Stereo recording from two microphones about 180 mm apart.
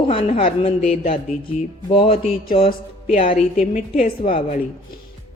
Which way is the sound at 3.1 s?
35° left (ahead or behind).